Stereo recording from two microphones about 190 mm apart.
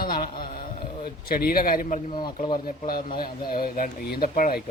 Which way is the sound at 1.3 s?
50° left (ahead or behind).